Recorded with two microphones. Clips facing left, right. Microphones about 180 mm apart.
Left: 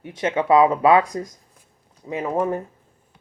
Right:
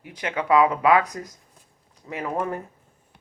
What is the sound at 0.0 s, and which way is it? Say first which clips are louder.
Speech: left 6 dB; 25° left (ahead or behind).